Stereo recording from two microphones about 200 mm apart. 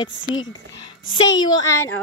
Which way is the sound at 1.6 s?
15° left (ahead or behind).